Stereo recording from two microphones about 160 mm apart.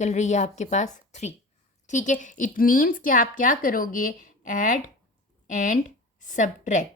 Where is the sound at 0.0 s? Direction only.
45° left (ahead or behind).